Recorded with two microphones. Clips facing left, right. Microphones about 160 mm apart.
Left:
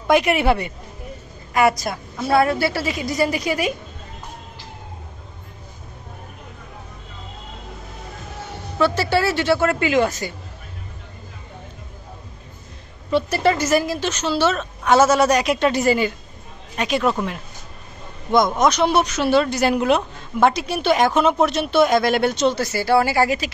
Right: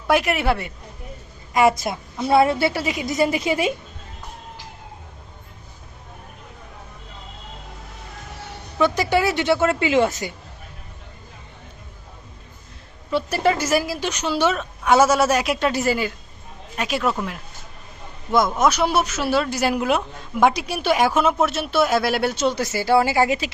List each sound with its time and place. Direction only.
0.1 s a woman's voice: centre (ahead or behind)
1.6 s a woman's voice: 25° right (ahead or behind)
8.7 s a woman's voice: 15° right (ahead or behind)
13.1 s a man's voice: 10° right (ahead or behind)
18.6 s a man's voice: 5° right (ahead or behind)